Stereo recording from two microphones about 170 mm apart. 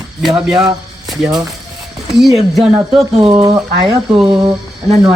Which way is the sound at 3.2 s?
25° right (ahead or behind).